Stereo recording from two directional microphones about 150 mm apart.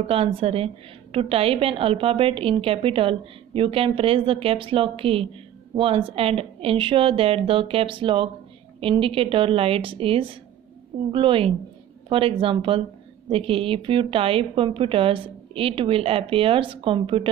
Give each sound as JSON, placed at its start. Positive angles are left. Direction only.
{"t": 0.0, "sound": "a woman's voice", "side_deg": -40}